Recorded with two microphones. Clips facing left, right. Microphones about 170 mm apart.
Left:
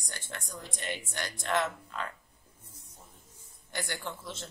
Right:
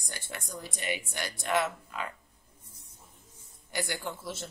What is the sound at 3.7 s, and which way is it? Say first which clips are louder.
Speech: right 3 dB; 10° right (ahead or behind).